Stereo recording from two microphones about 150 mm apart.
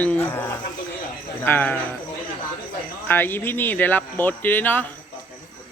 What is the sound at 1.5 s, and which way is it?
Speech, 10° left (ahead or behind).